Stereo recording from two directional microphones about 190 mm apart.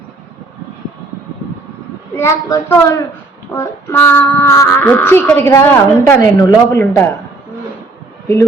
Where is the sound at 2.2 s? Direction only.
15° left (ahead or behind).